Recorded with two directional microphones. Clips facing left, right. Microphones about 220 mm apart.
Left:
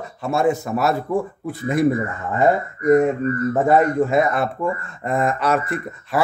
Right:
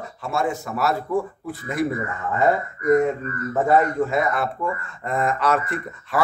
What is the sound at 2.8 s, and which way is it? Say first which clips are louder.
Speech: left 3 dB; 30° left (ahead or behind).